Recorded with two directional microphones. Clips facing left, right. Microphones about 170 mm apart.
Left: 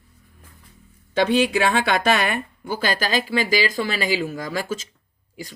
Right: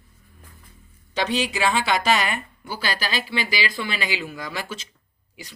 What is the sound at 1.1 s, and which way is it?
Speech, 55° left (ahead or behind).